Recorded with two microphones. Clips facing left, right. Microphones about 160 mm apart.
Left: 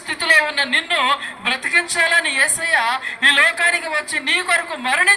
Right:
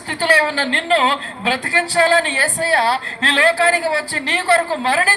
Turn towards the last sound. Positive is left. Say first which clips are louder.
# right 5 dB
turn(degrees=-35)  # may be behind; listen again after turning